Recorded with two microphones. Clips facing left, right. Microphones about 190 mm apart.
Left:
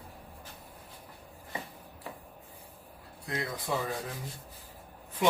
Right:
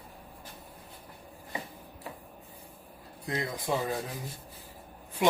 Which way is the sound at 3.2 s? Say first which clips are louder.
Right 2 dB; 20° right (ahead or behind).